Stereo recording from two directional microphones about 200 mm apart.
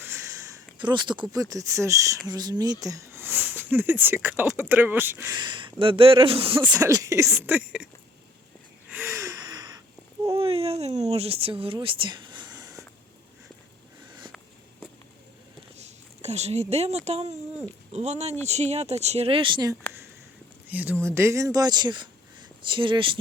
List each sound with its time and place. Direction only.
0.0 s speech: 10° right (ahead or behind)
6.7 s speech: 15° right (ahead or behind)
8.9 s gasp: 10° right (ahead or behind)
10.3 s a sound: 30° right (ahead or behind)
14.1 s sniff: 20° right (ahead or behind)
15.7 s a sound: 35° right (ahead or behind)
17.1 s speech: 35° right (ahead or behind)
20.7 s speech: 10° right (ahead or behind); by 23.1 s 25° right (ahead or behind)